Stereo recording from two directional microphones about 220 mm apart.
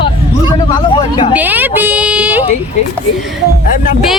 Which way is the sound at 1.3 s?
10° right (ahead or behind).